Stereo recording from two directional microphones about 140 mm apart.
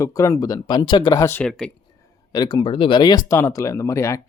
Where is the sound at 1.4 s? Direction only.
5° left (ahead or behind).